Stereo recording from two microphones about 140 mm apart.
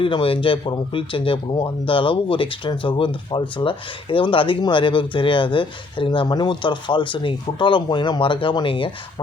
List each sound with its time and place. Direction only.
0.0 s speech: 40° left (ahead or behind)